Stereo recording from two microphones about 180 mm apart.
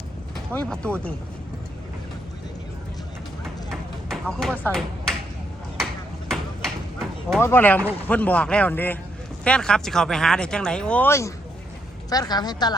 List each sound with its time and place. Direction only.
0.3 s speech: 5° left (ahead or behind)
4.1 s speech: centre (ahead or behind)
5.8 s a sound: centre (ahead or behind)
7.3 s a woman's voice: 10° left (ahead or behind)